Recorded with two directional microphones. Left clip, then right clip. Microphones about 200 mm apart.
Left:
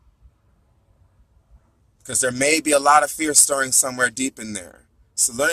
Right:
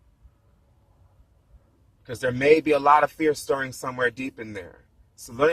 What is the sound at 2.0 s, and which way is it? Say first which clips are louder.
Speech: right 1 dB; 35° left (ahead or behind).